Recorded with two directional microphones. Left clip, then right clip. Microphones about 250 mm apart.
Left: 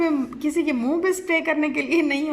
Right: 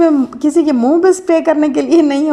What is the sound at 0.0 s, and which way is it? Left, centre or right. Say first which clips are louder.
A woman's voice: right 11 dB; right.